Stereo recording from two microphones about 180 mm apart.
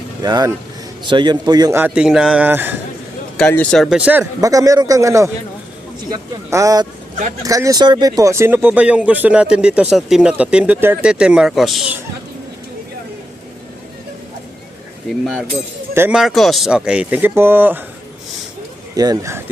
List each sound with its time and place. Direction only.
0.2 s a man's voice: 20° right (ahead or behind)
1.8 s speech: 5° right (ahead or behind)
3.3 s speech: 5° left (ahead or behind)
4.4 s a man's voice: 20° right (ahead or behind); by 11.9 s centre (ahead or behind)
15.2 s speech: 5° right (ahead or behind)
18.9 s a man's voice: 20° right (ahead or behind)